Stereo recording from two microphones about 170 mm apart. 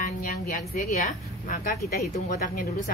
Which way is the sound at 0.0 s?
50° left (ahead or behind).